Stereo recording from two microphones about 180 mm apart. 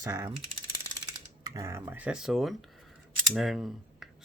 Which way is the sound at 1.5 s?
20° right (ahead or behind).